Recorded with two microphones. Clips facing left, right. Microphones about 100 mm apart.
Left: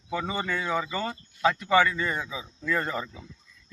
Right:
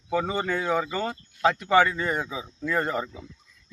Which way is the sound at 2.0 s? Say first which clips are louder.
Right 2 dB; 20° right (ahead or behind).